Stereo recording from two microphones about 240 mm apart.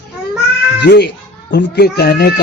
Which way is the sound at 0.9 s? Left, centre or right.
Left.